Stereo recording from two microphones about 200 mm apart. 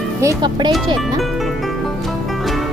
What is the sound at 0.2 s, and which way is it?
Speech, 20° right (ahead or behind).